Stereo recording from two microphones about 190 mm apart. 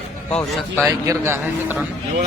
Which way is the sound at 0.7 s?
15° right (ahead or behind).